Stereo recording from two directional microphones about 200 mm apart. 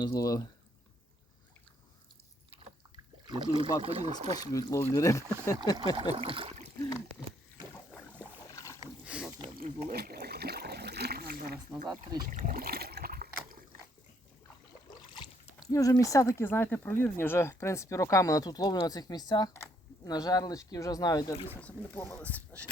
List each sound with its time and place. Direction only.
0.0 s speech: 15° left (ahead or behind)
2.9 s speech: 20° right (ahead or behind)
4.3 s speech: 15° left (ahead or behind)
6.1 s speech: 25° right (ahead or behind)
7.7 s rowboat: 5° left (ahead or behind)
8.4 s boat: 15° left (ahead or behind)
9.0 s a sound: 5° right (ahead or behind)
9.6 s a sound: 45° right (ahead or behind)
11.7 s speech: 5° right (ahead or behind)
12.3 s a sound: 40° right (ahead or behind)
15.1 s splash: 25° left (ahead or behind)
15.7 s speech: 15° left (ahead or behind)